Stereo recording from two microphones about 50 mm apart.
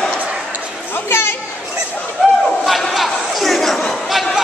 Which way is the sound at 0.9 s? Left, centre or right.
Left.